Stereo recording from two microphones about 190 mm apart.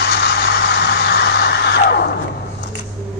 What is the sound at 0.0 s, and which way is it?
Vehicle, 60° left (ahead or behind).